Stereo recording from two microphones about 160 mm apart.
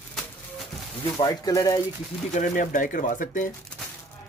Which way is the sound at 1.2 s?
20° left (ahead or behind).